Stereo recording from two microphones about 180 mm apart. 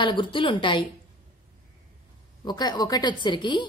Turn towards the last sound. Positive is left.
turn(degrees=25)  # may be behind; listen again after turning